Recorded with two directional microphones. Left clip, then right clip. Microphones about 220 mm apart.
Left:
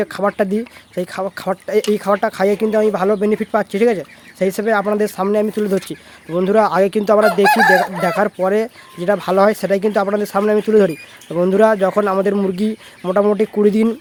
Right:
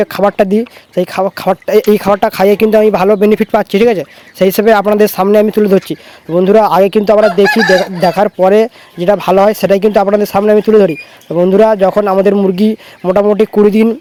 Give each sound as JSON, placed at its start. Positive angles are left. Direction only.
{"t": 0.0, "sound": "speech", "side_deg": -30}